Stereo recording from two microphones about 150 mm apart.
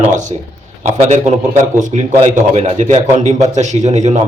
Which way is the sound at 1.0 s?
45° right (ahead or behind).